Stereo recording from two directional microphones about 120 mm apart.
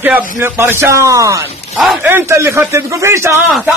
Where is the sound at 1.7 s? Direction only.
Centre (ahead or behind).